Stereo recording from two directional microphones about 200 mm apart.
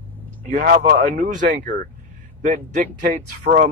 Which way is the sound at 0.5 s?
45° right (ahead or behind).